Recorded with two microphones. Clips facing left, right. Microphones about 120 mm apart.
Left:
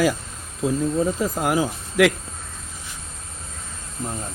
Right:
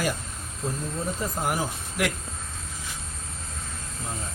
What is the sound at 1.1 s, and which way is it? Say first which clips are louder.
Speech: left 6 dB; 90° left.